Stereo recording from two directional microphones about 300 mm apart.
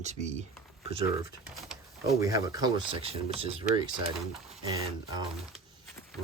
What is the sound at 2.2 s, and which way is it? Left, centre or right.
Speech, centre.